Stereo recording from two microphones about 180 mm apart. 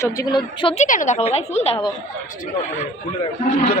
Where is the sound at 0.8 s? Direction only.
45° left (ahead or behind).